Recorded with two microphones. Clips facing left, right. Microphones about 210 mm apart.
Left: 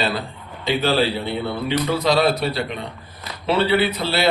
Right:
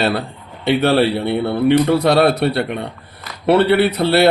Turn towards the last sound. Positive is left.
turn(degrees=-65)  # may be behind; listen again after turning